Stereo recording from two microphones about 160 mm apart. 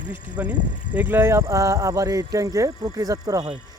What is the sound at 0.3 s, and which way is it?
A man's voice, 10° right (ahead or behind).